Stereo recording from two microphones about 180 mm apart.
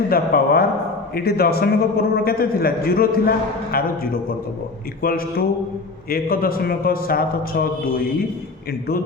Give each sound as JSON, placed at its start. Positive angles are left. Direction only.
{"t": 0.1, "sound": "a man's voice", "side_deg": 55}